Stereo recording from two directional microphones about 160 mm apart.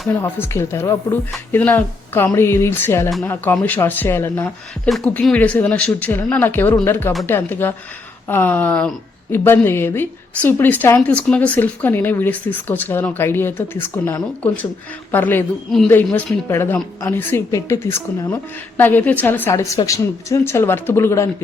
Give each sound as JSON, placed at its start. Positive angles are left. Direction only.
{"t": 0.1, "sound": "a woman's voice", "side_deg": 15}
{"t": 4.9, "sound": "a woman's voice", "side_deg": 5}
{"t": 16.5, "sound": "a woman's voice", "side_deg": 15}
{"t": 18.8, "sound": "a woman's voice", "side_deg": 10}